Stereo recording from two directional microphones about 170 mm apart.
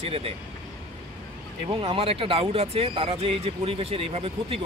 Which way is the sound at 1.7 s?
30° right (ahead or behind).